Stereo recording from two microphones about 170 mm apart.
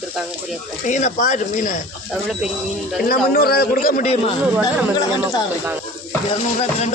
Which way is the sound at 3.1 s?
60° left (ahead or behind).